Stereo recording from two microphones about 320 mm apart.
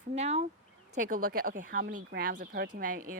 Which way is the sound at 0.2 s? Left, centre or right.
Centre.